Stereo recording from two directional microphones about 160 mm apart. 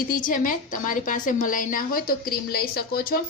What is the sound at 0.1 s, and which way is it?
A woman's voice, 55° left (ahead or behind).